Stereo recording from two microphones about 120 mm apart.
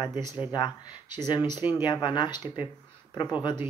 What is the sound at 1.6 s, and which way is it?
Speech, 15° right (ahead or behind).